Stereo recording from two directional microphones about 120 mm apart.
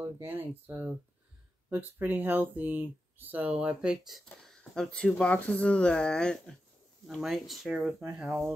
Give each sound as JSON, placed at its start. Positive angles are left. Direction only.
{"t": 0.2, "sound": "speech", "side_deg": -20}
{"t": 8.3, "sound": "speech", "side_deg": -25}